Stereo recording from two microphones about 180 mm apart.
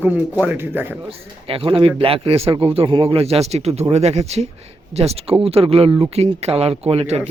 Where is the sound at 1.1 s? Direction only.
30° right (ahead or behind).